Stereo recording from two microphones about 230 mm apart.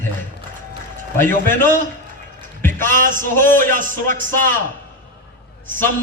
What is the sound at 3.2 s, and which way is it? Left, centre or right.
Speech, centre.